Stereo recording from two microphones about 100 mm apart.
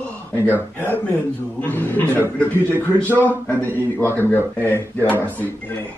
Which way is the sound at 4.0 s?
20° left (ahead or behind).